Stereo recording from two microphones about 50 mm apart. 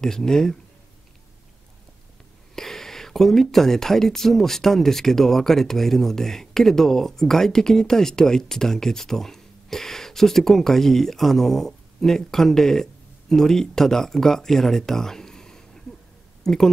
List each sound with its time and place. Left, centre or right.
0.0 s speech: centre
2.5 s speech: centre